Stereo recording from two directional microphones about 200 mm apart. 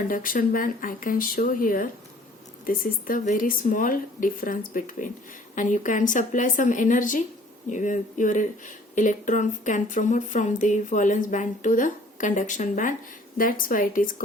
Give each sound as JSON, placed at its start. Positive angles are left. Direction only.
{"t": 0.1, "sound": "speech", "side_deg": 45}